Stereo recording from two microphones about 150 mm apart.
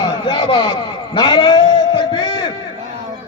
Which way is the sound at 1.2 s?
30° left (ahead or behind).